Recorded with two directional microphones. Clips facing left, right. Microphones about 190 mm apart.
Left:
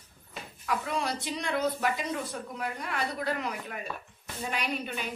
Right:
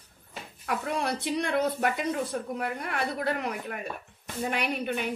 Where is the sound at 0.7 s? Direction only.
55° right (ahead or behind).